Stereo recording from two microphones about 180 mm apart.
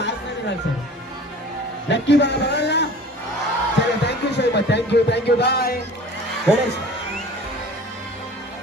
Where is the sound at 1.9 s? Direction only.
75° left (ahead or behind).